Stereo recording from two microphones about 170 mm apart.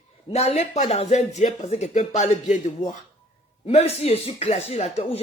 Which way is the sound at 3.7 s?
40° left (ahead or behind).